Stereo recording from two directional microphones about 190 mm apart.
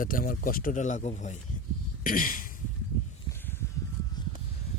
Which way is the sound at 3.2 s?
10° left (ahead or behind).